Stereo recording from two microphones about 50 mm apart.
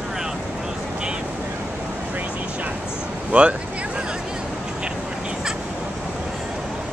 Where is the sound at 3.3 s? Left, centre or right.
Right.